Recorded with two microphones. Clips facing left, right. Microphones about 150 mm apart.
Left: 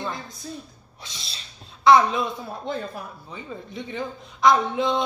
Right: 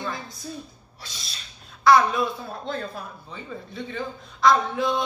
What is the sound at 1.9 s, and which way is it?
Speech, 20° left (ahead or behind).